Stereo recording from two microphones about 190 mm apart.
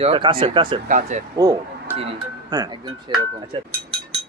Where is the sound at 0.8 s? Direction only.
45° right (ahead or behind).